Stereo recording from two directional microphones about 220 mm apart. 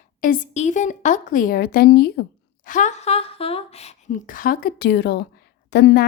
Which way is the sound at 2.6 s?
35° left (ahead or behind).